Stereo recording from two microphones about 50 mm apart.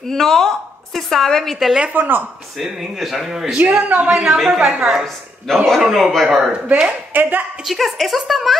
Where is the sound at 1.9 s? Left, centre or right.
Right.